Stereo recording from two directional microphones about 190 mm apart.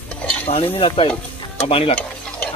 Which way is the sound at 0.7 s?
30° left (ahead or behind).